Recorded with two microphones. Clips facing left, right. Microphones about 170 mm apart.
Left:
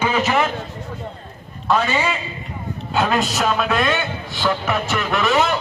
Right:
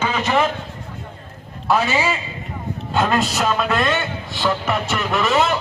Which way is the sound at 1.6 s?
10° right (ahead or behind).